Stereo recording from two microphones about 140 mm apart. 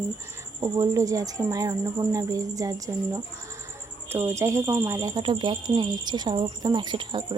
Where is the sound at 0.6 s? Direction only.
25° right (ahead or behind).